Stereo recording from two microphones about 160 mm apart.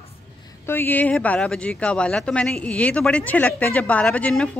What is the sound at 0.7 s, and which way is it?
Speech, 10° left (ahead or behind).